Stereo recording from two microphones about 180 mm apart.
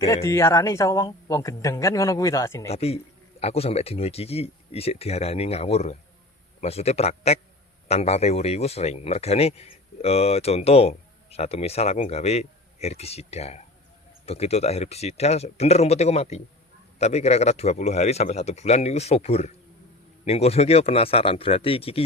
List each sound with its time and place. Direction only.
0.0 s speech: 15° left (ahead or behind)
2.6 s speech: 35° left (ahead or behind)